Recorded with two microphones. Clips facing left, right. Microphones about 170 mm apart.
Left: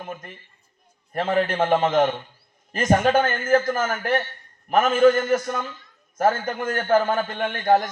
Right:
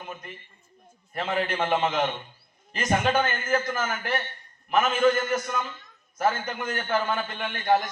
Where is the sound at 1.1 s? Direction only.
45° left (ahead or behind).